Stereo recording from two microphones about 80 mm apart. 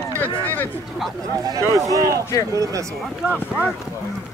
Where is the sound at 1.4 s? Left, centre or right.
Right.